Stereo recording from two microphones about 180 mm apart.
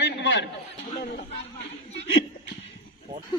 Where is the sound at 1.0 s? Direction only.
60° left (ahead or behind).